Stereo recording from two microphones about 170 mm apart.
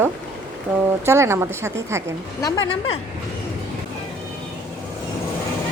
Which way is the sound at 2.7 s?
35° left (ahead or behind).